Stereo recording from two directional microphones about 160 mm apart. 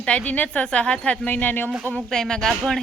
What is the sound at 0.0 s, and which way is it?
A woman's voice, 5° left (ahead or behind).